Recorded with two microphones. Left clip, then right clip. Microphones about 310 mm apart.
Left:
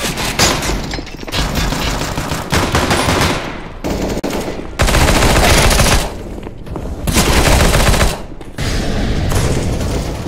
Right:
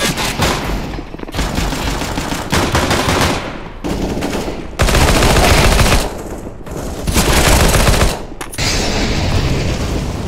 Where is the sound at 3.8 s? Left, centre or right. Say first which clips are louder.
Left 1 dB; centre.